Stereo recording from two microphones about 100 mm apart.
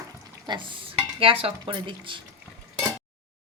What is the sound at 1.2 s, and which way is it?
Speech, 65° right (ahead or behind).